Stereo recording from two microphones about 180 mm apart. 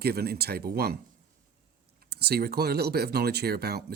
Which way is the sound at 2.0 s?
60° right (ahead or behind).